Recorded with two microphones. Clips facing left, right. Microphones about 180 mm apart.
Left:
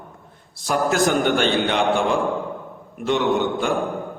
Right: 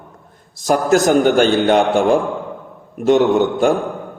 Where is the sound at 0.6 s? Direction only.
45° right (ahead or behind).